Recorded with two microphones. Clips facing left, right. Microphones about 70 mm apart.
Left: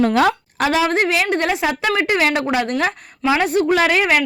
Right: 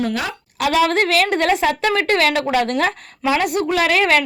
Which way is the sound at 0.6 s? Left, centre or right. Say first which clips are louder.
Right 1 dB; left.